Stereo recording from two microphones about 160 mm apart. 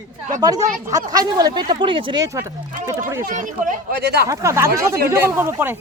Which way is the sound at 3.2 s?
55° right (ahead or behind).